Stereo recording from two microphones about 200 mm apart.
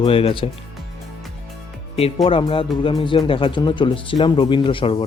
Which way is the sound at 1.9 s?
30° left (ahead or behind).